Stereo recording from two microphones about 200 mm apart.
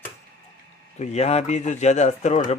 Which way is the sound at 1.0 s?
35° left (ahead or behind).